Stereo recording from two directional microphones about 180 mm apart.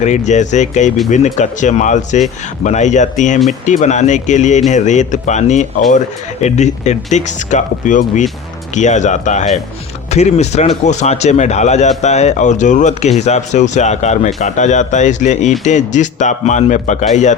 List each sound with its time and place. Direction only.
0.0 s speech: 40° left (ahead or behind)